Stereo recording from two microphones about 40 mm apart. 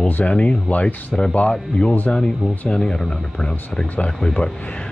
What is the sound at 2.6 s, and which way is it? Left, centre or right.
Speech, left.